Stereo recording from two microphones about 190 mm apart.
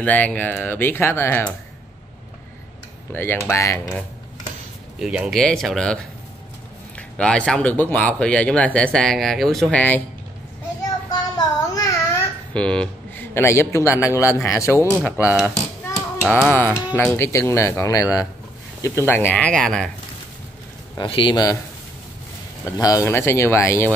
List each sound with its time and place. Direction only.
0.0 s a man's voice: 10° left (ahead or behind)
3.1 s a man's voice: 10° left (ahead or behind)
4.9 s speech: 5° right (ahead or behind)
7.0 s speech: 5° left (ahead or behind)
11.3 s a sound: 20° left (ahead or behind)
12.5 s a man's voice: 5° left (ahead or behind)
14.9 s speech: 10° right (ahead or behind)
16.4 s a man's voice: 10° left (ahead or behind)
20.9 s a man's voice: 25° left (ahead or behind)
22.7 s a man's voice: 20° left (ahead or behind)